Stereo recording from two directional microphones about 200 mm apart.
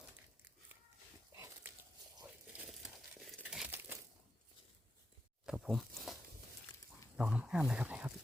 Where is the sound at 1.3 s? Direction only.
10° right (ahead or behind).